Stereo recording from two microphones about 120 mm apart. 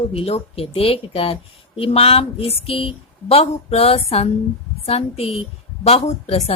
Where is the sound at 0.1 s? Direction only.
55° left (ahead or behind).